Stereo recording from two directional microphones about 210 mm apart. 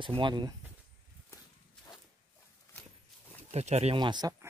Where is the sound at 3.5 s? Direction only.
30° right (ahead or behind).